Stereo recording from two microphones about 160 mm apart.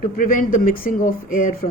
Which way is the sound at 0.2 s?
55° left (ahead or behind).